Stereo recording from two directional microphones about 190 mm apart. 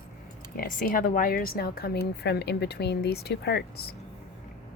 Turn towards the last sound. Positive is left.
turn(degrees=60)  # may be behind; listen again after turning